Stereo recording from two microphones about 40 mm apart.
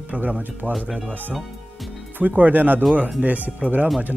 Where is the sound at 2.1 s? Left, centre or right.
Right.